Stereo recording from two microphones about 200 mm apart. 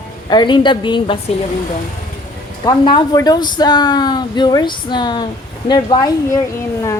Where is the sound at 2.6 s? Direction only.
20° left (ahead or behind).